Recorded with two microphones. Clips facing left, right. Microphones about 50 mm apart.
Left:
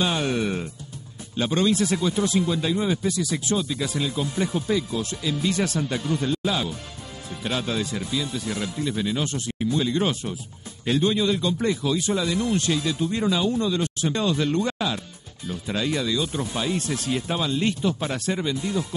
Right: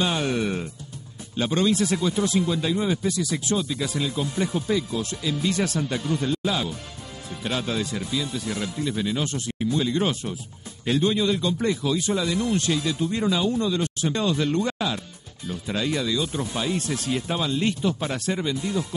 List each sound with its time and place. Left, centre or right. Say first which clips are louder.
0.0 s speech: even; left